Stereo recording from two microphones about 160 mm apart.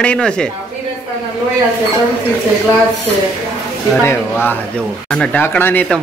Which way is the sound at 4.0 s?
15° left (ahead or behind).